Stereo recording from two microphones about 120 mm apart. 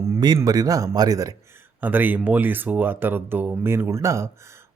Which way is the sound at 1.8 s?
15° right (ahead or behind).